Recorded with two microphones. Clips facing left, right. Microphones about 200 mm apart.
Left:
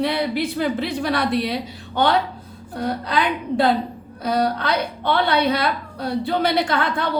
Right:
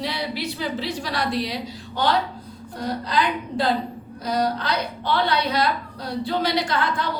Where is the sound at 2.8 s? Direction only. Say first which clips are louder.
Left 2 dB; 60° left (ahead or behind).